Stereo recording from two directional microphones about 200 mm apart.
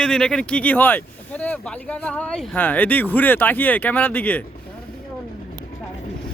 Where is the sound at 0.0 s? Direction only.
5° left (ahead or behind).